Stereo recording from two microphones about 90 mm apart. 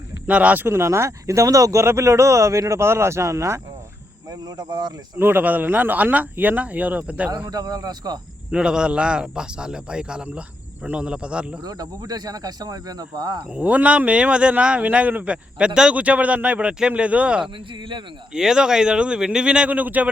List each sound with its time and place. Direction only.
0.3 s speech: 15° right (ahead or behind); by 3.6 s 35° right (ahead or behind)
4.3 s cricket: 50° right (ahead or behind)
5.1 s speech: 25° right (ahead or behind)
7.5 s cricket: 45° right (ahead or behind)
8.4 s speech: 10° right (ahead or behind)
11.6 s cricket: 45° right (ahead or behind)
13.5 s speech: 15° right (ahead or behind)